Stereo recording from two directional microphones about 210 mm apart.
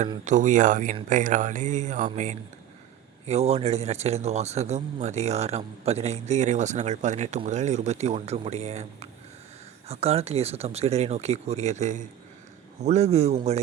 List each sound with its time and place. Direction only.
0.3 s a man's voice: 35° right (ahead or behind)